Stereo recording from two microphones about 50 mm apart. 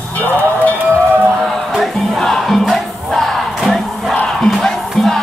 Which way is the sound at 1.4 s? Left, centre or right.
Centre.